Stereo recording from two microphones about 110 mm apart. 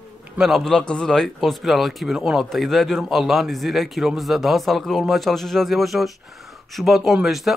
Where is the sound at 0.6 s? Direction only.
5° left (ahead or behind).